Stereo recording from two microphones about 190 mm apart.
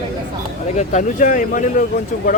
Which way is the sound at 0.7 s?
40° left (ahead or behind).